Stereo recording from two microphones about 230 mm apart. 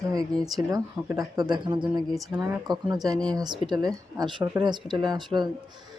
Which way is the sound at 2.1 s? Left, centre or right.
Centre.